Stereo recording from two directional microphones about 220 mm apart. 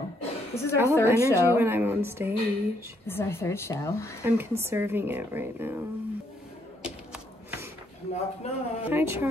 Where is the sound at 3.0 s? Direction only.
10° left (ahead or behind).